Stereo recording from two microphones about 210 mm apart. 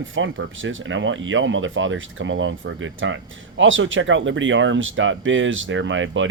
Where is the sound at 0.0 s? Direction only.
65° right (ahead or behind).